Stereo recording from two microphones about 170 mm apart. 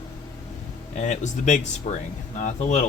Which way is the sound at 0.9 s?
45° left (ahead or behind).